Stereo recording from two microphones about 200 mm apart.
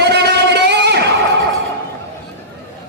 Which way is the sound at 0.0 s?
55° right (ahead or behind).